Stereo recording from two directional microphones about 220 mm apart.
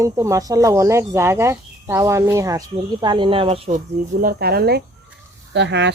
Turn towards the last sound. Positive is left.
turn(degrees=-50)  # may be behind; listen again after turning